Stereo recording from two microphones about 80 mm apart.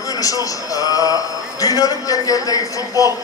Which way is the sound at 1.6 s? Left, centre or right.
Left.